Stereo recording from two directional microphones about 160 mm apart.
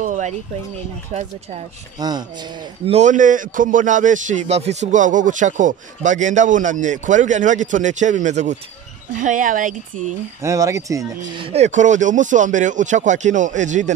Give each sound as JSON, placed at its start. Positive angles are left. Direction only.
{"t": 0.0, "sound": "a sound", "side_deg": -50}
{"t": 1.1, "sound": "a man's voice", "side_deg": -45}
{"t": 2.0, "sound": "speech", "side_deg": -25}
{"t": 2.9, "sound": "a man's voice", "side_deg": -50}
{"t": 10.4, "sound": "speech", "side_deg": -20}
{"t": 11.4, "sound": "a man's voice", "side_deg": -45}